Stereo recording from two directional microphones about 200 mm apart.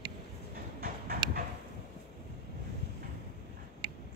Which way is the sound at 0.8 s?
50° right (ahead or behind).